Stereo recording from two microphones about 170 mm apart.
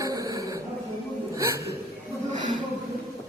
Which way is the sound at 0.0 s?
20° right (ahead or behind).